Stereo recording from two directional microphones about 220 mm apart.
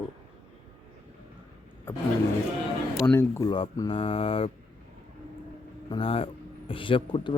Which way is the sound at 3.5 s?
25° left (ahead or behind).